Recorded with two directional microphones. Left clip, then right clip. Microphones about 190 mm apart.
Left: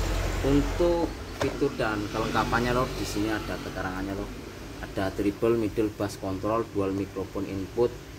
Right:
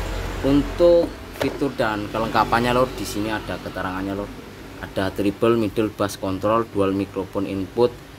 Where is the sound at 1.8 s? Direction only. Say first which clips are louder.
Right 6 dB; 45° right (ahead or behind).